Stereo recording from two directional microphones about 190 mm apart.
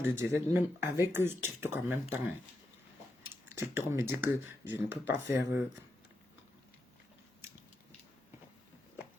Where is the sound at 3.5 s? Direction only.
15° right (ahead or behind).